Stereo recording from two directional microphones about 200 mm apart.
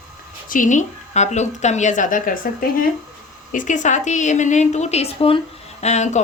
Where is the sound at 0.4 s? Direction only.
40° left (ahead or behind).